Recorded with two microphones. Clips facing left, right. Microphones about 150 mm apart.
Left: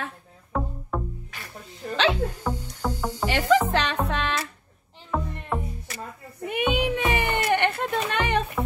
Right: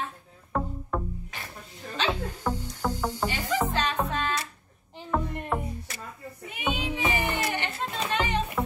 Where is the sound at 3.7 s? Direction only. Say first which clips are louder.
Left 3 dB; 80° left.